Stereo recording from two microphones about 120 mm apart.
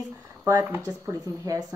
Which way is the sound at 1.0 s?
25° right (ahead or behind).